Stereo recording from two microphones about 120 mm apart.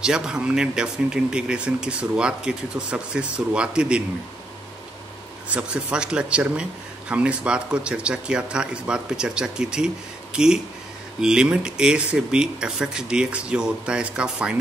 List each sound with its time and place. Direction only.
0.0 s speech: 5° right (ahead or behind)
5.5 s speech: 10° right (ahead or behind)